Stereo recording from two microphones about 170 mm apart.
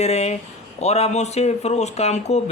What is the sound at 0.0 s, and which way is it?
Speech, 40° left (ahead or behind).